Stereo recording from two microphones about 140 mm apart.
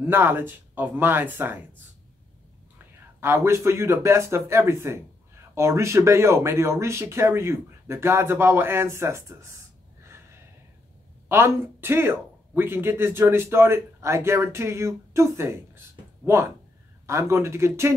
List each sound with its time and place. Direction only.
0.0 s speech: 15° right (ahead or behind)
3.2 s speech: 20° right (ahead or behind)
10.0 s snort: 20° right (ahead or behind)
11.2 s speech: 20° right (ahead or behind)